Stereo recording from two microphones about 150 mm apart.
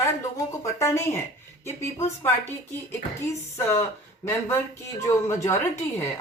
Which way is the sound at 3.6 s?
15° left (ahead or behind).